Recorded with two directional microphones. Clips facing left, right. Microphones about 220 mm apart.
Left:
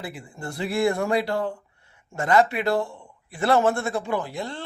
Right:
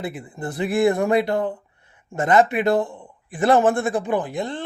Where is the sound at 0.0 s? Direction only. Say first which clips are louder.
Right 5 dB; 20° right (ahead or behind).